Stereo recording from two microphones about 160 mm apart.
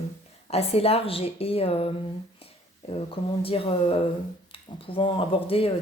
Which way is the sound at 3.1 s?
35° left (ahead or behind).